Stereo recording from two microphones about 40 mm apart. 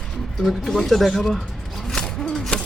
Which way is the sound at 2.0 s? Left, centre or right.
Centre.